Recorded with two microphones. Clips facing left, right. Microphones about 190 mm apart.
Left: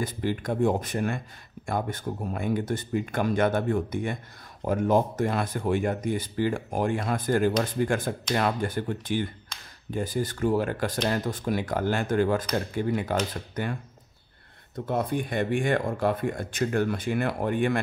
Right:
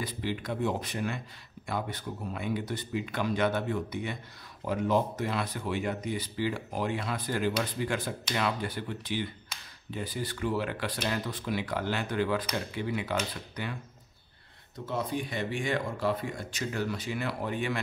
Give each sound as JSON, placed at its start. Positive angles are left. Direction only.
{"t": 0.0, "sound": "speech", "side_deg": 45}
{"t": 9.5, "sound": "a sound", "side_deg": -10}
{"t": 9.8, "sound": "speech", "side_deg": 45}
{"t": 14.9, "sound": "speech", "side_deg": 55}